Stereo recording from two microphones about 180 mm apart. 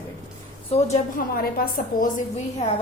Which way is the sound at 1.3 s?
55° left (ahead or behind).